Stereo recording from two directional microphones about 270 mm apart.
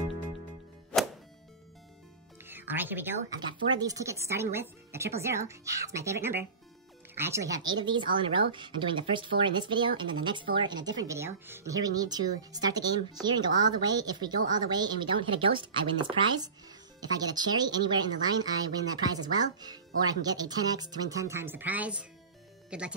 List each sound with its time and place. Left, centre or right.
0.9 s music: centre
2.4 s speech: centre